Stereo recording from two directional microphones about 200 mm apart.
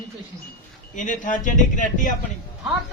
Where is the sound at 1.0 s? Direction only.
40° left (ahead or behind).